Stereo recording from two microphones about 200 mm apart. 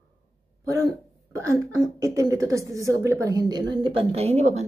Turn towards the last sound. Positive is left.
turn(degrees=-35)  # may be behind; listen again after turning